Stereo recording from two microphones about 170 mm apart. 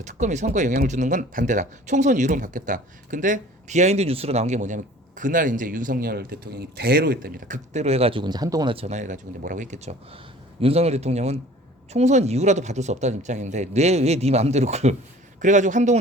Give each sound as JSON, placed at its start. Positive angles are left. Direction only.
{"t": 0.0, "sound": "speech", "side_deg": -45}
{"t": 8.7, "sound": "speech", "side_deg": -40}